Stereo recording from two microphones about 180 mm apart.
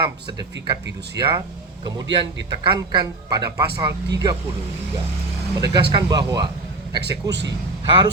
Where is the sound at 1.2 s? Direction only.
15° right (ahead or behind).